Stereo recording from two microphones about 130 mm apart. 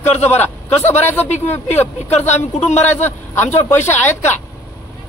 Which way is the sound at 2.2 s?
60° left (ahead or behind).